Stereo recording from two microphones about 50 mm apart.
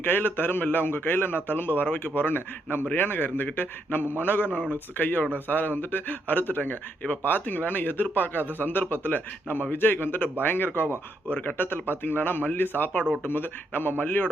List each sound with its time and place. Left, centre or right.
0.0 s a man's voice: left